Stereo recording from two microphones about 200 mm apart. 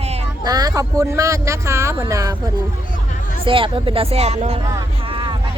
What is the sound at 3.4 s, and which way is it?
Speech, 25° right (ahead or behind).